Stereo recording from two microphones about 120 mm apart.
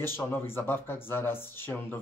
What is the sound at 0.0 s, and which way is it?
Speech, 20° left (ahead or behind).